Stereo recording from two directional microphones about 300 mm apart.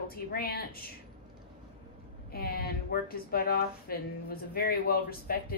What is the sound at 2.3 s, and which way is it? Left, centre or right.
A woman's voice, left.